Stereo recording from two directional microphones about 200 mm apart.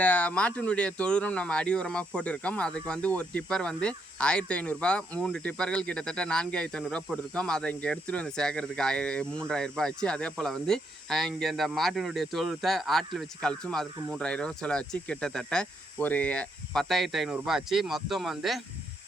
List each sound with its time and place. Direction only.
0.0 s speech: 5° left (ahead or behind)